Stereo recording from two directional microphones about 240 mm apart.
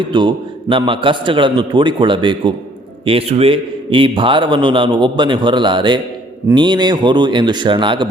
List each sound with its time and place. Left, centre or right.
0.0 s a man's voice: centre